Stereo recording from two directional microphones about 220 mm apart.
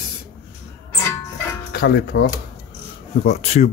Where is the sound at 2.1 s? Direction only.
45° left (ahead or behind).